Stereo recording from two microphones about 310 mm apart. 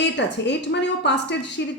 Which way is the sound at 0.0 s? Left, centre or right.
Left.